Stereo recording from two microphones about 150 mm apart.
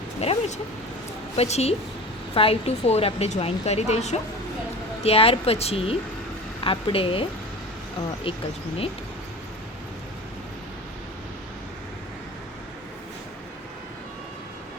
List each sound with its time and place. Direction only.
0.2 s a woman's voice: 45° left (ahead or behind)